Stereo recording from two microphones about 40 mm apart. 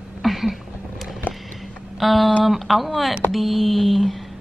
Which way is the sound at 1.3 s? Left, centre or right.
Left.